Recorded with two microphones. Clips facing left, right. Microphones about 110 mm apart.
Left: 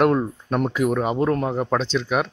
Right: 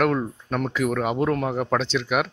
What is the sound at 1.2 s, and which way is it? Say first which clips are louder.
Speech: left 2 dB; 30° left (ahead or behind).